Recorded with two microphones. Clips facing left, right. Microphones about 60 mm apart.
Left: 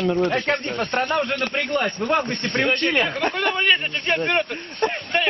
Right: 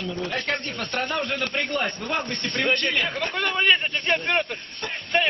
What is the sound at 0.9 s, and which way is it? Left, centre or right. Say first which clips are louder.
Speech: left 4 dB; left.